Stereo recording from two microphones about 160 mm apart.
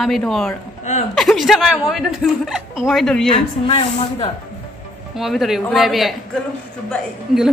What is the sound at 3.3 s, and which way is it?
Speech, 35° left (ahead or behind).